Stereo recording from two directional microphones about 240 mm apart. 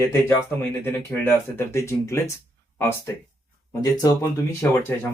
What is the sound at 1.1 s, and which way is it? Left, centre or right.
Speech, centre.